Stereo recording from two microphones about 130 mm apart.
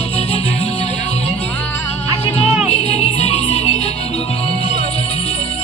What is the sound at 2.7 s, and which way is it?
Music, 55° left (ahead or behind).